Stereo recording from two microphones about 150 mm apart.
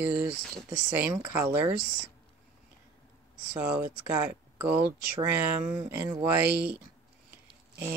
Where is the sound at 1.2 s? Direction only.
15° right (ahead or behind).